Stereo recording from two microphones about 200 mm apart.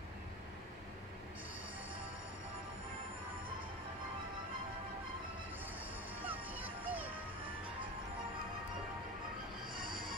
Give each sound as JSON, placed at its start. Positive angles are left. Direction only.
{"t": 6.2, "sound": "music", "side_deg": -10}
{"t": 9.8, "sound": "music", "side_deg": -45}